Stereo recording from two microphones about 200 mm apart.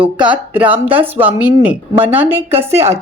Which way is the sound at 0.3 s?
10° right (ahead or behind).